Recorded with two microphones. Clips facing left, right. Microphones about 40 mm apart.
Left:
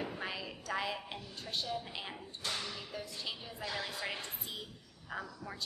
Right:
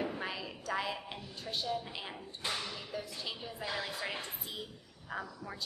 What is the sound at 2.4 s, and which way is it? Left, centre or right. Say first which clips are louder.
A woman's voice: right 2 dB; centre.